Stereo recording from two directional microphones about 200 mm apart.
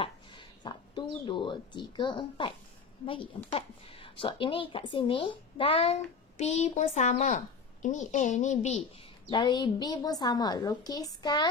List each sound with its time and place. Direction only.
0.7 s a woman's voice: 25° left (ahead or behind)
3.5 s a woman's voice: 25° left (ahead or behind)
9.3 s a woman's voice: 20° left (ahead or behind)